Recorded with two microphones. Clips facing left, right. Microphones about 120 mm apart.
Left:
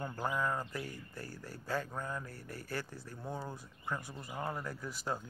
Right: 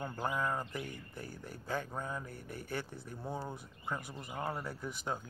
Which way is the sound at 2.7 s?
20° right (ahead or behind).